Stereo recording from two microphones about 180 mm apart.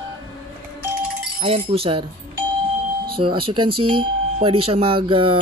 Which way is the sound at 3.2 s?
30° right (ahead or behind).